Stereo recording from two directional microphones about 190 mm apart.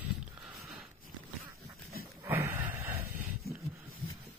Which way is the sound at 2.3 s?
10° right (ahead or behind).